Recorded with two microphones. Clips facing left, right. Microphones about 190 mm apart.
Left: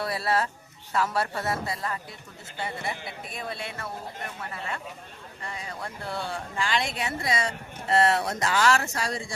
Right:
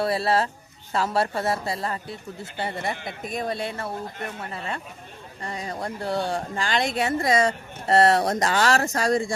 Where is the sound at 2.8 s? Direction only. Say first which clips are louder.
Right 5 dB; 45° right (ahead or behind).